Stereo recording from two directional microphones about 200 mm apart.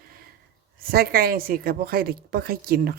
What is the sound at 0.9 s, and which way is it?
Speech, 50° right (ahead or behind).